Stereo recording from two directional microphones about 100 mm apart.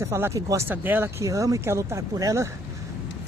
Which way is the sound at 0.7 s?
20° right (ahead or behind).